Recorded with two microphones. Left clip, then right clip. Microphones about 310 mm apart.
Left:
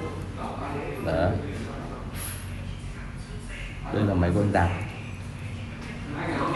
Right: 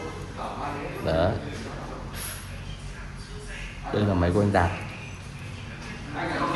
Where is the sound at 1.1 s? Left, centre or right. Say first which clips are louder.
Right 2 dB; right.